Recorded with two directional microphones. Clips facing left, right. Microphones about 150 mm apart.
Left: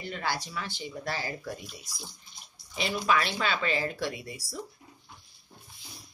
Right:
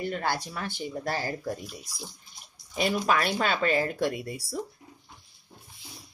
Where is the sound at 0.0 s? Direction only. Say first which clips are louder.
Right 4 dB; 50° right (ahead or behind).